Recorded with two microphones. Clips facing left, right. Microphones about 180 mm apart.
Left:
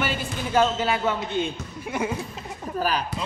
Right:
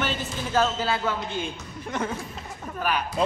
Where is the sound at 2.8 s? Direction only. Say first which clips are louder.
Left 2 dB; 35° left (ahead or behind).